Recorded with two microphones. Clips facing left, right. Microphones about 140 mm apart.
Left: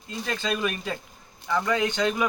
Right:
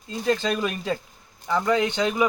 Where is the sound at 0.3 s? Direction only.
35° right (ahead or behind).